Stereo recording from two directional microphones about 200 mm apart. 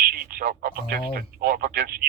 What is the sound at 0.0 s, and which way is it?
Speech, 45° right (ahead or behind).